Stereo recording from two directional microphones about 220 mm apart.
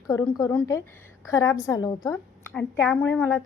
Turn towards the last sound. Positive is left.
turn(degrees=10)  # may be behind; listen again after turning